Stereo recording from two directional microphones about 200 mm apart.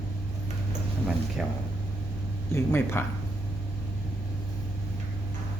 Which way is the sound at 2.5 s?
10° left (ahead or behind).